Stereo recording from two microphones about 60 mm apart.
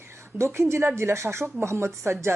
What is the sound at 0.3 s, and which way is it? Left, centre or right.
A woman's voice, right.